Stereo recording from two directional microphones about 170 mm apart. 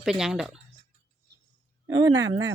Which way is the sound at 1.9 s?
25° right (ahead or behind).